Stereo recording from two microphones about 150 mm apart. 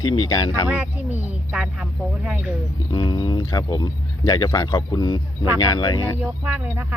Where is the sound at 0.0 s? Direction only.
30° left (ahead or behind).